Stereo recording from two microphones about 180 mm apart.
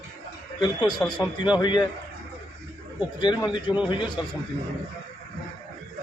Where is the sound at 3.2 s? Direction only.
25° left (ahead or behind).